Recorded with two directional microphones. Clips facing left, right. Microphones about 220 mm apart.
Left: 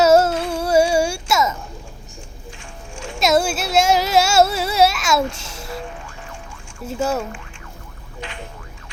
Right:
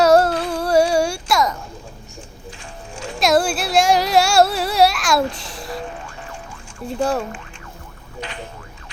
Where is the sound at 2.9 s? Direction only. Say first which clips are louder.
Right 1 dB; 35° right (ahead or behind).